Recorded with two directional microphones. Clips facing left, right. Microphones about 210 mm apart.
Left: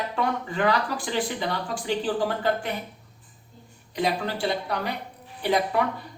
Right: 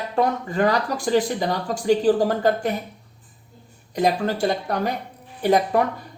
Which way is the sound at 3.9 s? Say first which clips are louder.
Right 5 dB; 45° right (ahead or behind).